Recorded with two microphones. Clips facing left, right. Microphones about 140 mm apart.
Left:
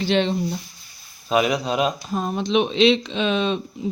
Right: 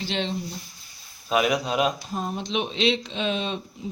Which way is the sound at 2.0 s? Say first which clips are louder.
Left 6 dB; 90° left.